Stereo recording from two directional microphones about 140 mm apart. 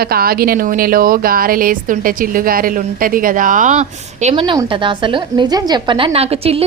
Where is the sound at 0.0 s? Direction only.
90° right; by 4.4 s 55° right (ahead or behind).